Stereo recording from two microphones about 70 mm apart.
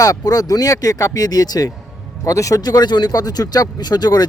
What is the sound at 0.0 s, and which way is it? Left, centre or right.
Speech, left.